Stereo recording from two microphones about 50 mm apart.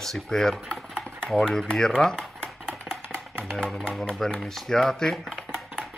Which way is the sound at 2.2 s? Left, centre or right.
Centre.